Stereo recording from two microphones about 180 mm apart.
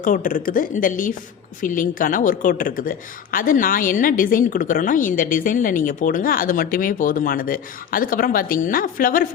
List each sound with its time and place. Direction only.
0.0 s a woman's voice: 50° left (ahead or behind)